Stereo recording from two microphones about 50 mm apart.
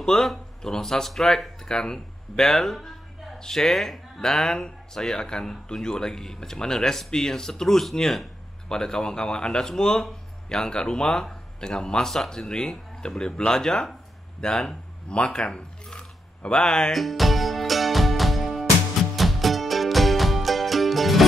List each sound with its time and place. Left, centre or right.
0.0 s speech: centre
16.9 s music: centre